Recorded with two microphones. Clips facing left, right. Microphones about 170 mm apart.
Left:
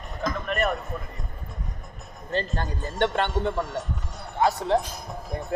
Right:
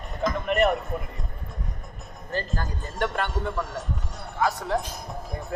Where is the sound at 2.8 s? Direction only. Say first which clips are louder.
Left 3 dB; centre (ahead or behind).